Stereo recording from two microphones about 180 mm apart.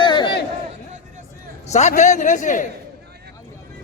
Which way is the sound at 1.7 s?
40° left (ahead or behind).